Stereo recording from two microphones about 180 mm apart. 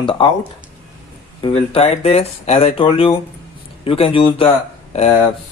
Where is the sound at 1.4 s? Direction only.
30° left (ahead or behind).